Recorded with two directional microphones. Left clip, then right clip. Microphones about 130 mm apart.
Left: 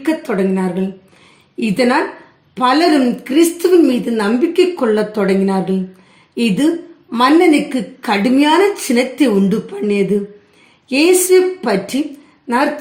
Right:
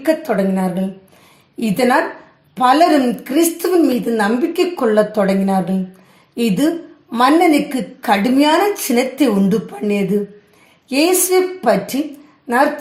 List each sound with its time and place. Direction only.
0.0 s a woman's voice: 45° right (ahead or behind)